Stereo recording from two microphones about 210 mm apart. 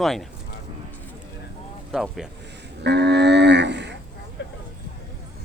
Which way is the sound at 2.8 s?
55° right (ahead or behind).